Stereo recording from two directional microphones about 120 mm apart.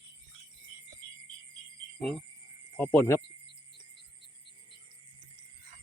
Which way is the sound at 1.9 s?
5° left (ahead or behind).